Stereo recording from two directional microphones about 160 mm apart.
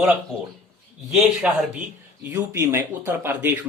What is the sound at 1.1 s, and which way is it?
Speech, 5° right (ahead or behind).